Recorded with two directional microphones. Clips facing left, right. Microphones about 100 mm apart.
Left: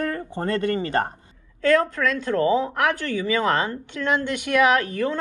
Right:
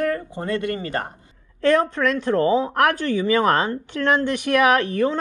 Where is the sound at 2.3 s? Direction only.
30° right (ahead or behind).